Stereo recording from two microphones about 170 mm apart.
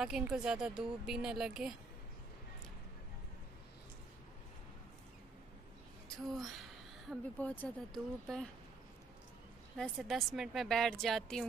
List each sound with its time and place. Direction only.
0.0 s speech: 5° right (ahead or behind)
7.1 s speech: 10° left (ahead or behind)
9.8 s speech: centre (ahead or behind)